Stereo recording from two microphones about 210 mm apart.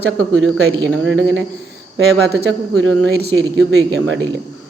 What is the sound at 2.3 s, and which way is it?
Speech, 50° right (ahead or behind).